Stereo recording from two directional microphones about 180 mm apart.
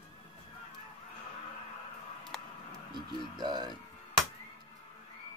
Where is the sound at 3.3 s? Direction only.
25° right (ahead or behind).